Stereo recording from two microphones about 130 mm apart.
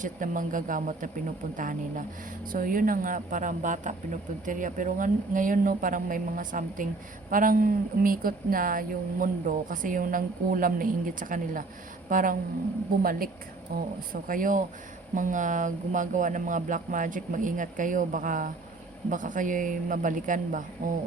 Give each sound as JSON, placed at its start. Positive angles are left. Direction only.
{"t": 0.0, "sound": "a woman's voice", "side_deg": -90}